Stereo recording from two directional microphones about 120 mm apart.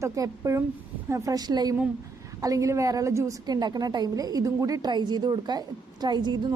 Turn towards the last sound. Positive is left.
turn(degrees=-35)  # may be behind; listen again after turning